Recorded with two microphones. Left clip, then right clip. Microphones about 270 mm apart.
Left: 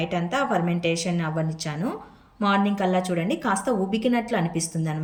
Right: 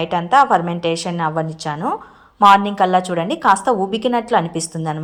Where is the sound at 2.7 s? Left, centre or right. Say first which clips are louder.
Right 9 dB; centre.